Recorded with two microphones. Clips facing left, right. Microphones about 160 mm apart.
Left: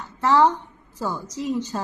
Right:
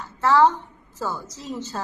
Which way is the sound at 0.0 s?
20° left (ahead or behind).